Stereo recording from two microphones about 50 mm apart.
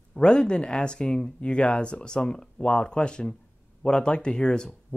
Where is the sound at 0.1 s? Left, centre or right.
Centre.